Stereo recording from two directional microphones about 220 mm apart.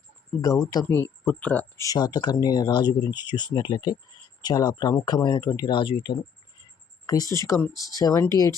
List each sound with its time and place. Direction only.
0.3 s speech: 15° left (ahead or behind)